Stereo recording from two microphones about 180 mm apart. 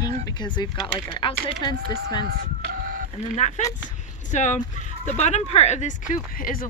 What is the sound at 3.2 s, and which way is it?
Speech, 40° left (ahead or behind).